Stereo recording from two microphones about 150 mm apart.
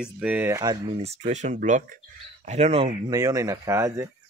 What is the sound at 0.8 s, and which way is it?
Speech, 45° right (ahead or behind).